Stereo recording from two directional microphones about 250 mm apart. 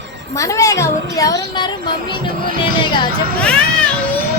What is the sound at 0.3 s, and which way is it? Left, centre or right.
A woman's voice, centre.